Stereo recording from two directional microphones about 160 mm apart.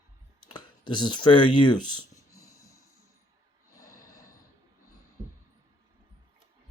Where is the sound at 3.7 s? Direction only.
20° left (ahead or behind).